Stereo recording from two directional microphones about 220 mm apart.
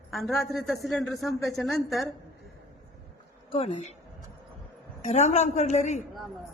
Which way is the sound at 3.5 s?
25° left (ahead or behind).